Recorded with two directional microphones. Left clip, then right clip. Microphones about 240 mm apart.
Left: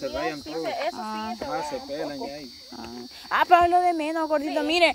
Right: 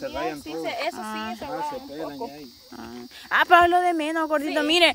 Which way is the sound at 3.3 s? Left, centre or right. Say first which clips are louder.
Right 1 dB; centre.